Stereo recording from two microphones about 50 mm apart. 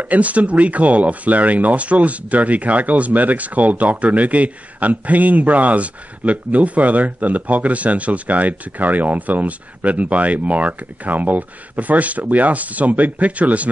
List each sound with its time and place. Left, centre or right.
0.0 s speech: right